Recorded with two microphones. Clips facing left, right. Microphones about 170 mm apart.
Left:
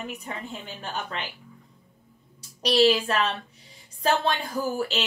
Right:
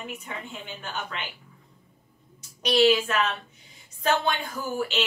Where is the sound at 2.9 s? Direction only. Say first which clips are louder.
Even; 35° left (ahead or behind).